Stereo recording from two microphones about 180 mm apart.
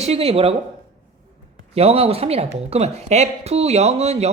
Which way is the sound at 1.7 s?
35° right (ahead or behind).